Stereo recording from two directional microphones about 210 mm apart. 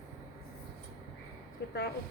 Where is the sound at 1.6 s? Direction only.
50° left (ahead or behind).